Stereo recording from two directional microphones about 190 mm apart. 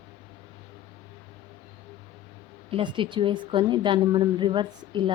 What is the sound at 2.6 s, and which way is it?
A woman's voice, 25° right (ahead or behind).